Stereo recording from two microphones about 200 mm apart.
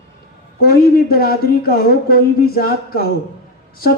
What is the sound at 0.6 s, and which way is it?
Speech, 50° left (ahead or behind).